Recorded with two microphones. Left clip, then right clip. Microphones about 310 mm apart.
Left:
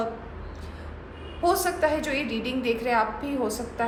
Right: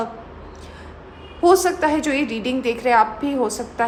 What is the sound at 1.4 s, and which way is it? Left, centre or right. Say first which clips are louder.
A woman's voice: right 7 dB; right.